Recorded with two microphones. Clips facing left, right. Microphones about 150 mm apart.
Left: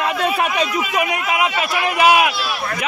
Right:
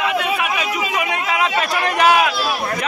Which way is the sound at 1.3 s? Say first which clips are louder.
Even; 10° left (ahead or behind).